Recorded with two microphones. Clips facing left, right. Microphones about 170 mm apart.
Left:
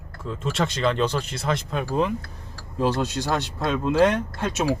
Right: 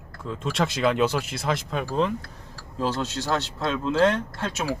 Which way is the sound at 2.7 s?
15° left (ahead or behind).